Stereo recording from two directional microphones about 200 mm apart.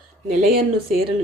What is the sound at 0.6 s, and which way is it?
Speech, 30° right (ahead or behind).